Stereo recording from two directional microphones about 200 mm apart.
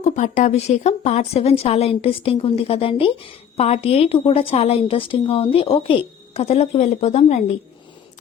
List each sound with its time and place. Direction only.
0.0 s speech: 40° left (ahead or behind)